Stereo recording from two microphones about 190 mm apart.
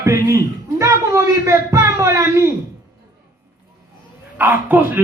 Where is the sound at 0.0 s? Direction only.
15° right (ahead or behind).